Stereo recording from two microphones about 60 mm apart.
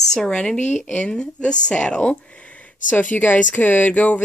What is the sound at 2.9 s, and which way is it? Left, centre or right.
Speech, left.